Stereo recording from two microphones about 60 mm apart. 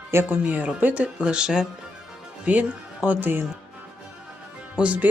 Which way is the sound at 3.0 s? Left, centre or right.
Right.